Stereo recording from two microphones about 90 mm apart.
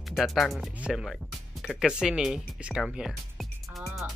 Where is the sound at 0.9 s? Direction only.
Centre (ahead or behind).